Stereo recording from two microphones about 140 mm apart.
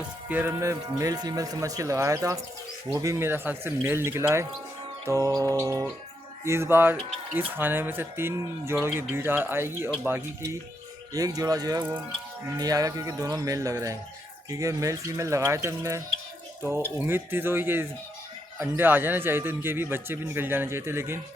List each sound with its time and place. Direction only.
0.3 s speech: 15° right (ahead or behind)
11.8 s speech: 15° right (ahead or behind)
12.5 s speech: 25° right (ahead or behind)